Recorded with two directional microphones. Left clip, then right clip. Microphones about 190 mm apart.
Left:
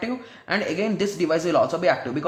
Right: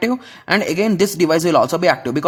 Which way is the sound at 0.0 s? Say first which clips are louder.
Right 9 dB; 50° right (ahead or behind).